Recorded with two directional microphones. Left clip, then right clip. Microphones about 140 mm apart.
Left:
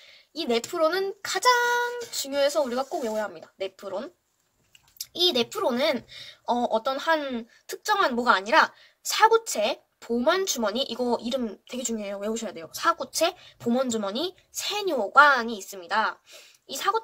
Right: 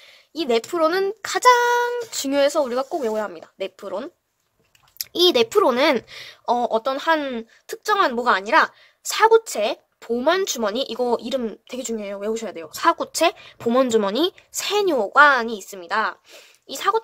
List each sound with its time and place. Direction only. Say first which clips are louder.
0.0 s speech: right 5 dB; 50° right (ahead or behind)
5.1 s speech: right 8 dB; 40° right (ahead or behind)
11.8 s speech: right 4 dB; 25° right (ahead or behind); by 17.0 s 40° right (ahead or behind)